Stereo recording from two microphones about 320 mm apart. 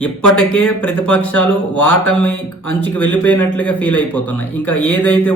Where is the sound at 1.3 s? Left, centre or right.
Left.